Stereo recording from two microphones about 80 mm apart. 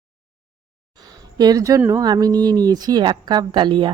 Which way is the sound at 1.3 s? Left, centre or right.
Right.